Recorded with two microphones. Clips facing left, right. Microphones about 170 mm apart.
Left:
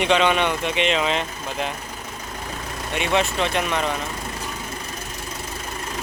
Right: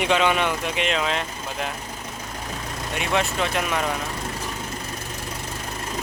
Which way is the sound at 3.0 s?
Centre (ahead or behind).